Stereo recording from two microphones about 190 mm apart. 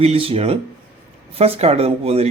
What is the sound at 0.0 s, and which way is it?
Speech, 30° right (ahead or behind).